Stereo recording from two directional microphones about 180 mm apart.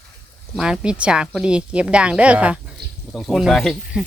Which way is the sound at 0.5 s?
5° right (ahead or behind).